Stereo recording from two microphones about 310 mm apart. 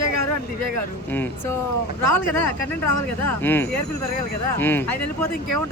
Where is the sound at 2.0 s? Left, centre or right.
Left.